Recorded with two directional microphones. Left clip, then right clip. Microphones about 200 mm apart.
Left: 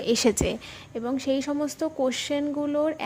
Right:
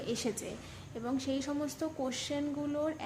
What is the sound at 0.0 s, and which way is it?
Speech, 45° left (ahead or behind).